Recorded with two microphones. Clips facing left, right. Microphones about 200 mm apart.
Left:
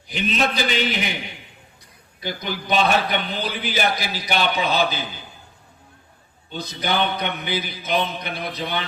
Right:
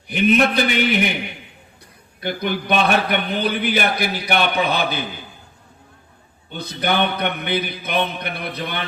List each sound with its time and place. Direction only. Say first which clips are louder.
0.1 s a man's voice: right 7 dB; 60° right (ahead or behind)
2.2 s a man's voice: right 5 dB; 60° right (ahead or behind)
6.5 s a man's voice: right 3 dB; 60° right (ahead or behind)